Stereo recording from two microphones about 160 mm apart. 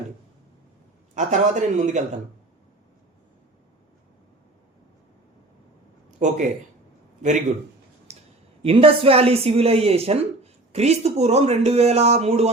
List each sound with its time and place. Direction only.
1.1 s a man's voice: 50° right (ahead or behind)
6.1 s a sound: 50° right (ahead or behind)
7.2 s a man's voice: 50° right (ahead or behind)
8.6 s speech: 35° right (ahead or behind)